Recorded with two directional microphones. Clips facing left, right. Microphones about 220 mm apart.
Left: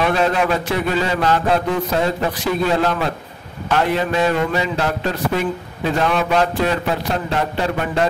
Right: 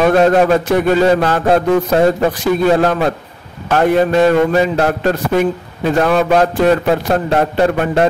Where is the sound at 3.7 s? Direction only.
45° right (ahead or behind).